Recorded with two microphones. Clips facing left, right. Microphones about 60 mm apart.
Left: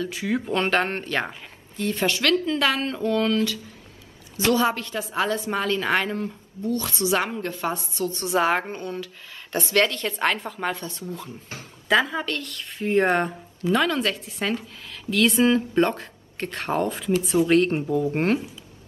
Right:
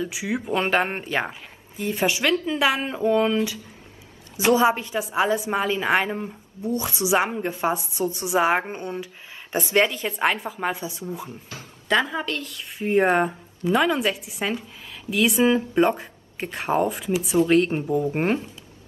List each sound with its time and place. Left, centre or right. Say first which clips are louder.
0.0 s speech: left 1 dB; centre
11.9 s a woman's voice: left 1 dB; centre